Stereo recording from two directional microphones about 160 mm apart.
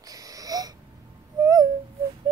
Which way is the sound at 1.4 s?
20° right (ahead or behind).